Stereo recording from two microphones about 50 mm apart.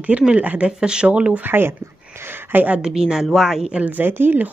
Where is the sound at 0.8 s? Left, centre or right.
Centre.